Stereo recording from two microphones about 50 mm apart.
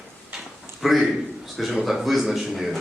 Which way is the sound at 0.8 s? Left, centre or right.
Centre.